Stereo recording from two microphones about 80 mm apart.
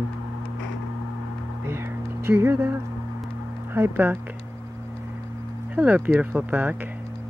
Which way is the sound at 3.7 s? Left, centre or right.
Right.